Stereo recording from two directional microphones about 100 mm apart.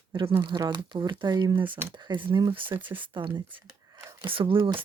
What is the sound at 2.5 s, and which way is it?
Speech, 55° right (ahead or behind).